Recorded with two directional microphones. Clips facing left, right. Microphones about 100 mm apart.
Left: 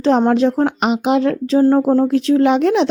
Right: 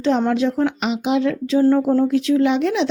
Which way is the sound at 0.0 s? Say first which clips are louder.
Left 4 dB; 45° left (ahead or behind).